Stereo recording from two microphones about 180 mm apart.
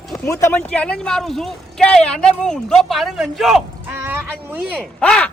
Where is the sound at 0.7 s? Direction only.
5° left (ahead or behind).